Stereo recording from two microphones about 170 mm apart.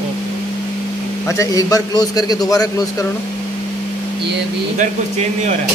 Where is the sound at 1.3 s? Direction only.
20° left (ahead or behind).